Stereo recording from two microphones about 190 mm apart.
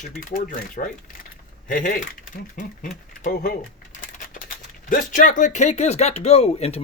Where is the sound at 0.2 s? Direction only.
45° left (ahead or behind).